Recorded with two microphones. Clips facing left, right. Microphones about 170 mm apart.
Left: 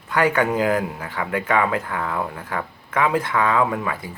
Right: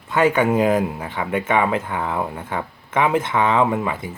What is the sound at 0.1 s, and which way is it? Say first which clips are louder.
Speech: right 2 dB; 20° right (ahead or behind).